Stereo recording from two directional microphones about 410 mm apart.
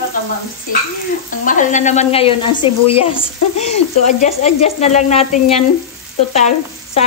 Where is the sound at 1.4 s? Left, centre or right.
Centre.